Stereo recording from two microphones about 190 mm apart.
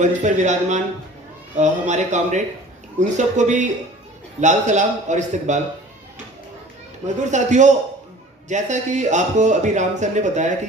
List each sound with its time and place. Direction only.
0.0 s speech: 40° right (ahead or behind)
7.3 s speech: 40° right (ahead or behind)